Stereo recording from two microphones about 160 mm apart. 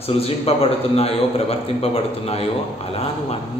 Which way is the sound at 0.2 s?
40° left (ahead or behind).